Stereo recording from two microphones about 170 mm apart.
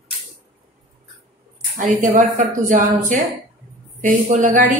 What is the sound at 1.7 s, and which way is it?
A woman's voice, 50° right (ahead or behind).